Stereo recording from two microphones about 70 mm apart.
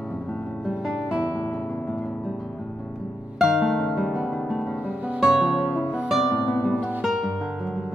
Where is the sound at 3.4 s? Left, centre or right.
Centre.